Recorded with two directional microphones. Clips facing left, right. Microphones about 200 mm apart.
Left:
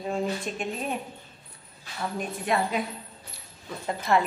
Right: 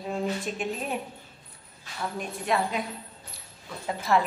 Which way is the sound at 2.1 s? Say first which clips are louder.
Left 1 dB; centre (ahead or behind).